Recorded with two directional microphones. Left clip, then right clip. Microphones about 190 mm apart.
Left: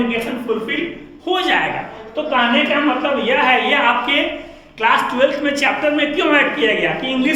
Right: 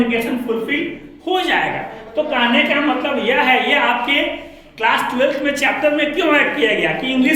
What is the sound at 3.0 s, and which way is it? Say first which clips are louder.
A man's voice: left 1 dB; 10° left (ahead or behind).